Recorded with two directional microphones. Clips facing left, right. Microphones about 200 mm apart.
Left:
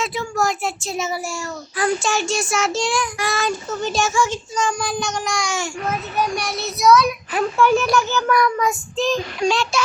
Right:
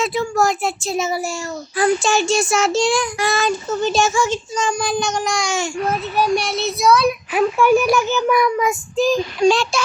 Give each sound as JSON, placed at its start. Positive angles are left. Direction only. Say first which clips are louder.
{"t": 0.0, "sound": "a child's voice", "louder": "right 4 dB", "side_deg": -30}
{"t": 7.3, "sound": "a child's voice", "louder": "right 2 dB", "side_deg": -10}
{"t": 9.4, "sound": "a child's voice", "louder": "right 5 dB", "side_deg": -30}